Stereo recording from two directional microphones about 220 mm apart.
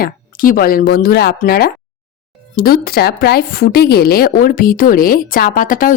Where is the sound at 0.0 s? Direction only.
40° left (ahead or behind).